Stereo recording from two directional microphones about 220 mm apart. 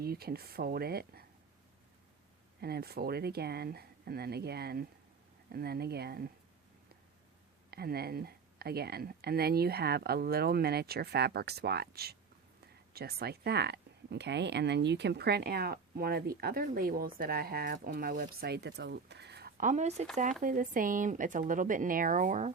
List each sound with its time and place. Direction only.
0.0 s speech: 45° right (ahead or behind)
2.6 s speech: 45° right (ahead or behind)
7.7 s speech: 45° right (ahead or behind)